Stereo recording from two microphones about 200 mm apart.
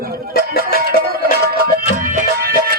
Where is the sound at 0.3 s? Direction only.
50° left (ahead or behind).